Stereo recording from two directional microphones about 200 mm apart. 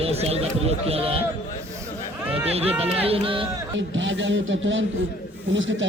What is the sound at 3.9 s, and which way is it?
A man's voice, 70° right (ahead or behind).